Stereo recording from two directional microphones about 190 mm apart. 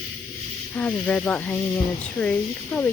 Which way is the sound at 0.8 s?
5° left (ahead or behind).